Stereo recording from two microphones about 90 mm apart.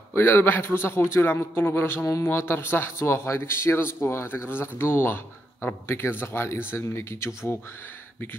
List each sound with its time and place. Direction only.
0.1 s speech: 25° left (ahead or behind)